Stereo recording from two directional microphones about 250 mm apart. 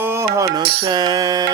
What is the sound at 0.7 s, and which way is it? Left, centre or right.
Mantra, centre.